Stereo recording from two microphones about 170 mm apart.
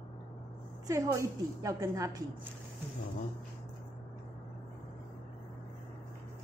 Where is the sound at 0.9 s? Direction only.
15° right (ahead or behind).